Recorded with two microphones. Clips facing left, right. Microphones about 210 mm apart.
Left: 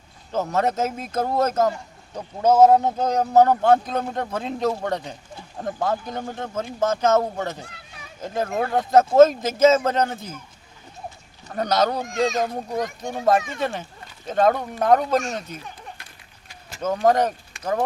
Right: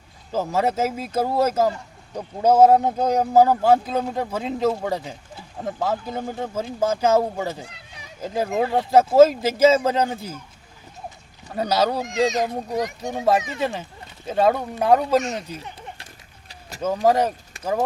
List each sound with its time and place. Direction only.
0.3 s speech: 10° right (ahead or behind)
7.7 s a sound: 20° right (ahead or behind)
8.2 s speech: 10° right (ahead or behind)
11.4 s speech: 5° right (ahead or behind)
12.0 s a child's voice: 20° right (ahead or behind)
13.5 s speech: 5° right (ahead or behind)
15.4 s a sound: 30° right (ahead or behind)
16.8 s speech: 10° right (ahead or behind)